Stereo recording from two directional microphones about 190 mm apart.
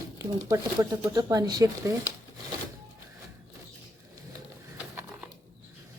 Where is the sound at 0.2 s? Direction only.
15° right (ahead or behind).